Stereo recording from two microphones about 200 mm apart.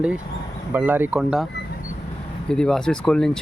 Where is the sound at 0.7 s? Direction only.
10° right (ahead or behind).